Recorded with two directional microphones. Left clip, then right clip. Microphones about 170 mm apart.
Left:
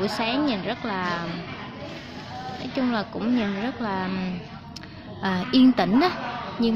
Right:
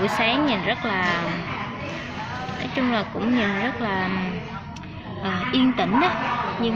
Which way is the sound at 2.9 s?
25° left (ahead or behind).